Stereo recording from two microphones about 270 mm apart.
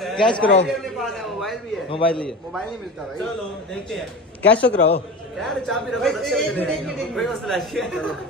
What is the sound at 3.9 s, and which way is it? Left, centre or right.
A man's voice, centre.